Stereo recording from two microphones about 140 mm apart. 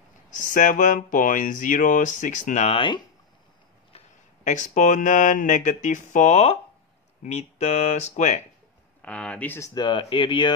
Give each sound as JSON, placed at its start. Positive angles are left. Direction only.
{"t": 0.3, "sound": "speech", "side_deg": 65}
{"t": 4.5, "sound": "speech", "side_deg": 60}
{"t": 9.0, "sound": "speech", "side_deg": 5}
{"t": 9.8, "sound": "speech", "side_deg": 35}